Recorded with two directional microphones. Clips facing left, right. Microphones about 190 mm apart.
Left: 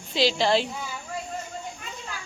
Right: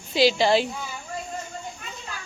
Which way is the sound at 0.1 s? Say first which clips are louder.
Right 3 dB; 5° right (ahead or behind).